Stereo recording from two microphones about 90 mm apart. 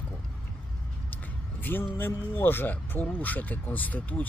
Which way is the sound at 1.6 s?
25° left (ahead or behind).